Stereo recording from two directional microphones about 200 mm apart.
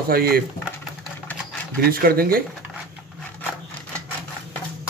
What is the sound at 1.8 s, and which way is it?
Speech, 50° right (ahead or behind).